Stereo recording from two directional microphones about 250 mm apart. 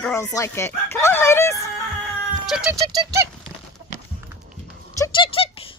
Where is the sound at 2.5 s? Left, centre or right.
Centre.